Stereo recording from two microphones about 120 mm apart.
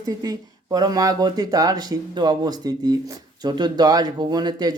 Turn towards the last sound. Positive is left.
turn(degrees=-35)  # may be behind; listen again after turning